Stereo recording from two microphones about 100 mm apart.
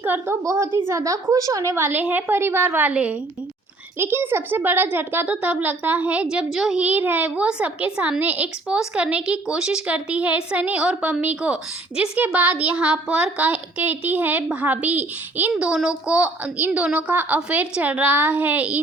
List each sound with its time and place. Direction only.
0.0 s a woman's voice: 20° right (ahead or behind)
0.9 s a woman's voice: 30° right (ahead or behind); by 6.8 s 5° right (ahead or behind)
6.8 s a child's voice: 15° right (ahead or behind)